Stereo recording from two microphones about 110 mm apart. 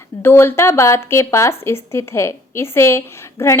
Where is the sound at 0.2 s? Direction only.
20° left (ahead or behind).